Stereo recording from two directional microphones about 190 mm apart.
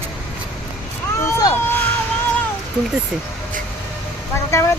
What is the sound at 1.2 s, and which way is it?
Vehicle, 15° left (ahead or behind).